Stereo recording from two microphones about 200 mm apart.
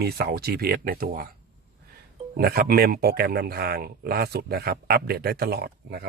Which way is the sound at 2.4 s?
50° right (ahead or behind).